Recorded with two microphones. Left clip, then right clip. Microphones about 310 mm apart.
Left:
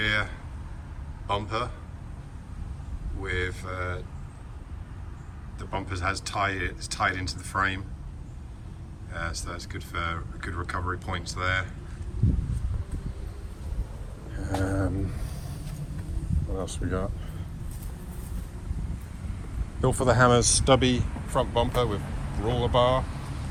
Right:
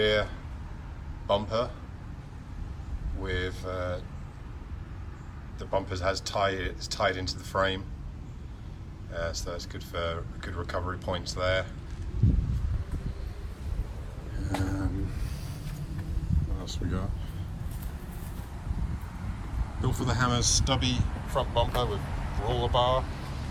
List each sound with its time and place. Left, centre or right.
0.0 s a sound: centre
1.3 s speech: centre
3.2 s speech: centre
5.5 s speech: centre
9.1 s speech: centre
14.4 s a sound: centre
16.6 s speech: centre
19.8 s speech: centre
20.4 s speech: left
20.7 s speech: centre